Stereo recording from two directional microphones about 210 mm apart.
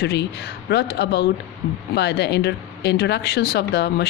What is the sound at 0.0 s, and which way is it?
Speech, 55° left (ahead or behind).